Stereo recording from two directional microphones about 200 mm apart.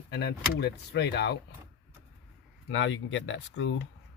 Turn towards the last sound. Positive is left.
turn(degrees=70)  # may be behind; listen again after turning